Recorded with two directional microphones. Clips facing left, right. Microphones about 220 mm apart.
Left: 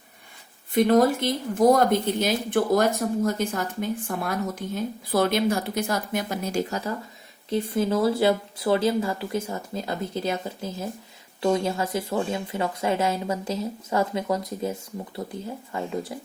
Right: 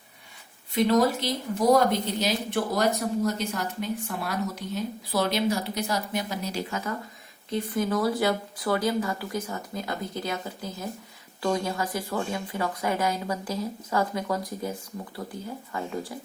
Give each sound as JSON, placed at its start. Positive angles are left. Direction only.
{"t": 0.7, "sound": "speech", "side_deg": 50}
{"t": 7.5, "sound": "speech", "side_deg": 25}